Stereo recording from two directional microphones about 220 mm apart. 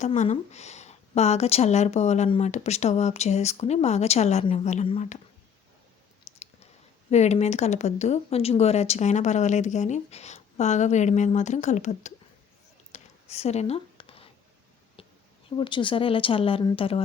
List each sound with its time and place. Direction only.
0.0 s a woman's voice: 30° left (ahead or behind)
7.1 s speech: 30° left (ahead or behind)
12.9 s a sound: 30° left (ahead or behind)
15.4 s a woman's voice: 20° left (ahead or behind)